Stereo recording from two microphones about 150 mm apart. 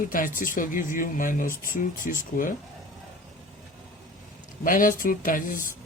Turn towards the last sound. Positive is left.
turn(degrees=65)  # may be behind; listen again after turning